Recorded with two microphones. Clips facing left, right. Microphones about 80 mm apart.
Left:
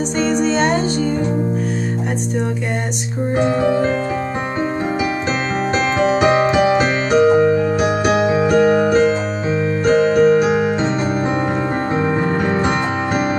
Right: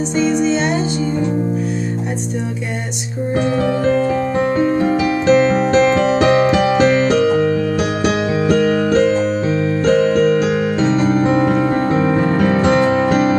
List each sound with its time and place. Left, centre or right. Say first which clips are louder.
0.2 s music: right 2 dB; left
5.3 s music: right 7 dB; centre